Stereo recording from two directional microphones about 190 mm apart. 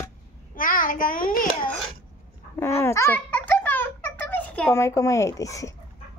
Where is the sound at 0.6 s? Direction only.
45° left (ahead or behind).